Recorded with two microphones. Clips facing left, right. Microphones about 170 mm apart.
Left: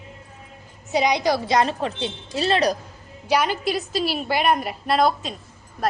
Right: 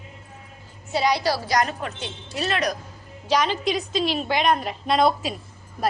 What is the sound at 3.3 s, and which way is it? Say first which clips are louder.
A woman's voice: left 1 dB; 10° left (ahead or behind).